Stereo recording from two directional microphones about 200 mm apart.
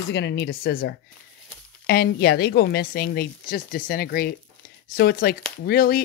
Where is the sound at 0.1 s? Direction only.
60° left (ahead or behind).